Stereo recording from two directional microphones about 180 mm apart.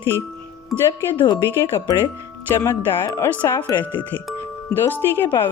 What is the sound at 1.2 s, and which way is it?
Speech, 15° left (ahead or behind).